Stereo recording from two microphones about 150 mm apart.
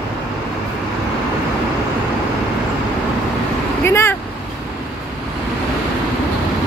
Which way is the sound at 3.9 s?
15° left (ahead or behind).